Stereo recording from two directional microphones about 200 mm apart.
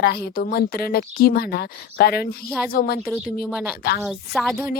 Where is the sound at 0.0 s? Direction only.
50° left (ahead or behind).